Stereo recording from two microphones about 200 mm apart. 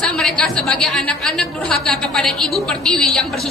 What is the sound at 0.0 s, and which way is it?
A woman's voice, 5° left (ahead or behind).